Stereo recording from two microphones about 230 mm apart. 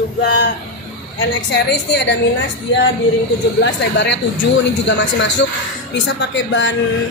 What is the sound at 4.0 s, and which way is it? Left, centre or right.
Speech, left.